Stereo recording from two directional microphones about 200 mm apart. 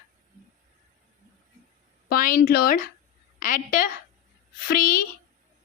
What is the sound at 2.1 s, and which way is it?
A woman's voice, 45° left (ahead or behind).